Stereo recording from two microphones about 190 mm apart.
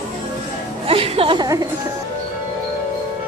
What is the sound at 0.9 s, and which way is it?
Music, 30° right (ahead or behind).